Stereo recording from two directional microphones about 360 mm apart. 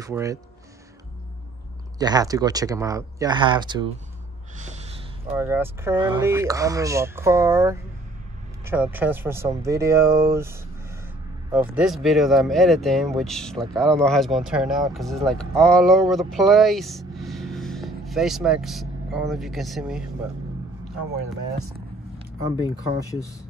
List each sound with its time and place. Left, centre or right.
0.0 s speech: centre
2.0 s speech: centre
5.3 s speech: centre
21.5 s speech: right